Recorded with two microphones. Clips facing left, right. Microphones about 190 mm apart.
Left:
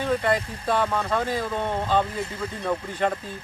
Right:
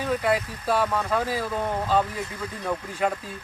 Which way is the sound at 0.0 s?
5° right (ahead or behind).